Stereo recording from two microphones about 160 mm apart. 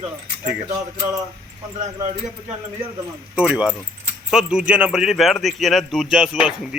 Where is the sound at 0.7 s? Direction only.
20° right (ahead or behind).